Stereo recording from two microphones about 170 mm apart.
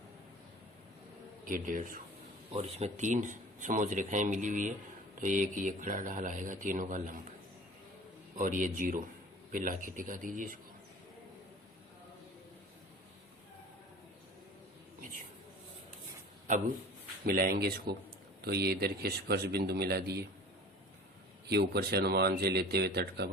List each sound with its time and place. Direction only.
1.5 s speech: 50° right (ahead or behind)
2.5 s speech: 40° right (ahead or behind)
8.4 s speech: 50° right (ahead or behind)
17.2 s speech: 60° right (ahead or behind)
21.5 s speech: 70° right (ahead or behind)